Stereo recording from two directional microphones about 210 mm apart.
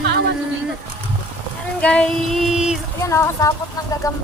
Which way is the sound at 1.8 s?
5° left (ahead or behind).